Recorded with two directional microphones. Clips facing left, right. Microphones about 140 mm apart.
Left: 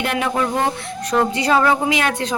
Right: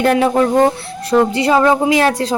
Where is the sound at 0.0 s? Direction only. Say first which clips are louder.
Right 8 dB; 35° right (ahead or behind).